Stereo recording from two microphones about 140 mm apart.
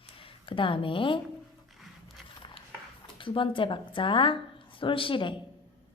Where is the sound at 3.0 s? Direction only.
35° left (ahead or behind).